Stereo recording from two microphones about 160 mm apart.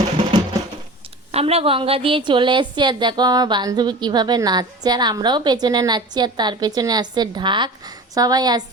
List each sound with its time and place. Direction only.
1.3 s a woman's voice: 40° right (ahead or behind)